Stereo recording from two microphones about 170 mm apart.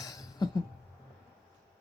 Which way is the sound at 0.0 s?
20° left (ahead or behind).